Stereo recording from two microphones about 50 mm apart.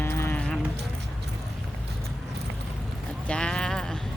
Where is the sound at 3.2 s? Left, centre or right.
Centre.